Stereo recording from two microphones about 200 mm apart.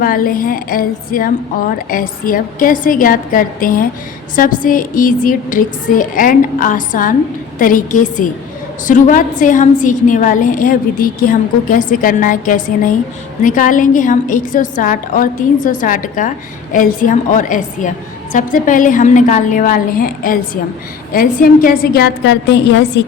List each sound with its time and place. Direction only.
0.0 s a woman's voice: 45° left (ahead or behind)